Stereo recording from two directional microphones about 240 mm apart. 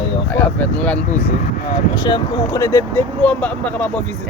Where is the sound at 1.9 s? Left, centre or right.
Centre.